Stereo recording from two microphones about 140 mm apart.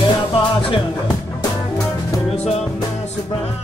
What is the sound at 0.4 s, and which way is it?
Music, 35° left (ahead or behind).